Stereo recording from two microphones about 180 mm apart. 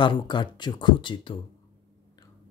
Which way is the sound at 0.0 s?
25° left (ahead or behind).